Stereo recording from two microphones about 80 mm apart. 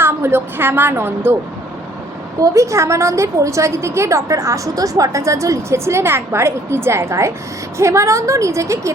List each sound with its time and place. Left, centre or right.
0.0 s a woman's voice: right
2.4 s a woman's voice: right